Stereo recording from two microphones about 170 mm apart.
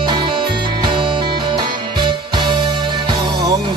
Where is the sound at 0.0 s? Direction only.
30° right (ahead or behind).